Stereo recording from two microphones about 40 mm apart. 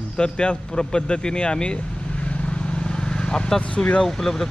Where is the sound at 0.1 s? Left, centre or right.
Left.